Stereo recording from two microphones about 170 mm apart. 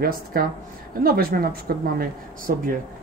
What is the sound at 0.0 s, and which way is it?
Speech, 60° right (ahead or behind).